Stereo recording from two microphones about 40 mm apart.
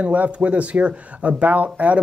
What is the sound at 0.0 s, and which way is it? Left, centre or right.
Speech, right.